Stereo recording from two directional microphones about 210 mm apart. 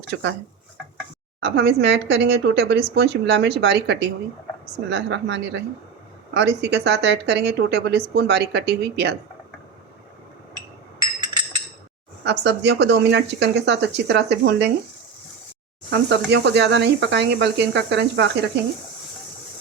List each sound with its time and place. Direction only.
0.1 s speech: 60° right (ahead or behind)
1.4 s a woman's voice: 55° right (ahead or behind)
12.2 s speech: 55° right (ahead or behind)
15.9 s speech: 55° right (ahead or behind)